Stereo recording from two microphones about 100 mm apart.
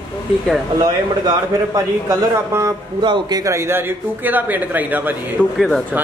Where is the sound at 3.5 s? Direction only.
25° right (ahead or behind).